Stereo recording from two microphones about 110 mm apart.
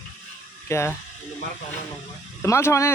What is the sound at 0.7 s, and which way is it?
Speech, 25° left (ahead or behind).